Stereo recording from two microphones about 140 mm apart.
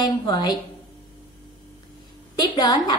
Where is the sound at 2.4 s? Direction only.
30° left (ahead or behind).